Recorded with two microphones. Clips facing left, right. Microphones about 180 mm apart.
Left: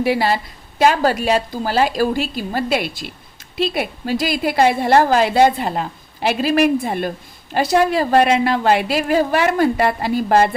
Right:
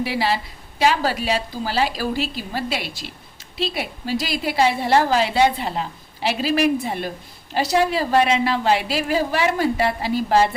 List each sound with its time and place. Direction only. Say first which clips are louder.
0.0 s a woman's voice: left 5 dB; 50° left (ahead or behind)